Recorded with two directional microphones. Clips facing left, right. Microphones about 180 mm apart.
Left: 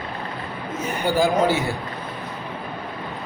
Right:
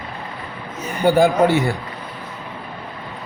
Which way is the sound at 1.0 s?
60° right (ahead or behind).